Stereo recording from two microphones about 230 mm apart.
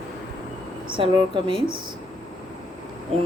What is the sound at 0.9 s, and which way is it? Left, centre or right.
Speech, right.